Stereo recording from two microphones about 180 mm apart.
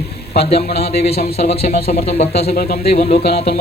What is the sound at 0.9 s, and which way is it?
A man's voice, 60° left (ahead or behind).